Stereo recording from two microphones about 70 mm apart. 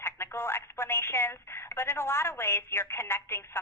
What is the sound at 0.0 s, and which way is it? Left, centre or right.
Speech, left.